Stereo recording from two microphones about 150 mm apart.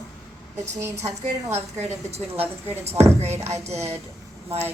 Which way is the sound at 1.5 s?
45° right (ahead or behind).